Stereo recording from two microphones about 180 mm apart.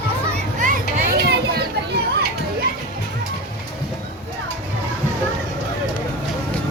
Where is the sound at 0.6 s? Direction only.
50° right (ahead or behind).